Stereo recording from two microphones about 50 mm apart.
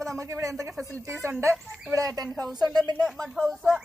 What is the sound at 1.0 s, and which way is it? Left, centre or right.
Speech, right.